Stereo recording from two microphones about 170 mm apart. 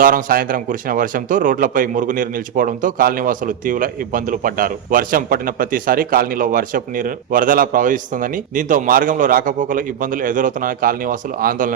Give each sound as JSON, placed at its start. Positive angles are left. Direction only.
{"t": 0.0, "sound": "speech", "side_deg": -55}